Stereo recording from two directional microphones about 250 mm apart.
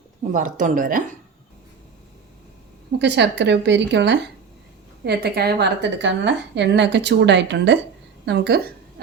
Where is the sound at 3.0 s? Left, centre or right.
Right.